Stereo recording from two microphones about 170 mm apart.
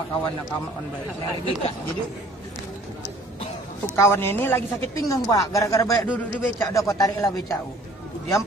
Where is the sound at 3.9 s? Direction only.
15° left (ahead or behind).